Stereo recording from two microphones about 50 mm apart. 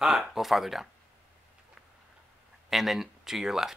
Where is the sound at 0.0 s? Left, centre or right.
Centre.